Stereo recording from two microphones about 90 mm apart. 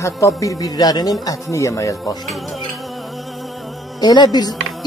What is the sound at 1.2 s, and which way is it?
Speech, 35° left (ahead or behind).